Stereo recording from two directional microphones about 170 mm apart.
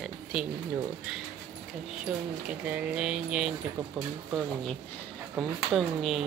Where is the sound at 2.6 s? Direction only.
5° right (ahead or behind).